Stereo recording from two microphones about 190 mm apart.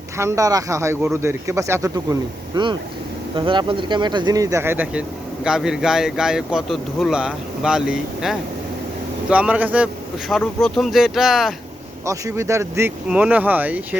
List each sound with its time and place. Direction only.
0.2 s speech: 15° right (ahead or behind)
12.0 s speech: 15° right (ahead or behind)